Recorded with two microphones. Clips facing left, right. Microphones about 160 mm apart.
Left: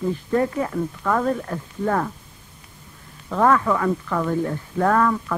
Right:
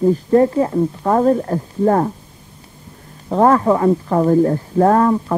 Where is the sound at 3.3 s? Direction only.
35° right (ahead or behind).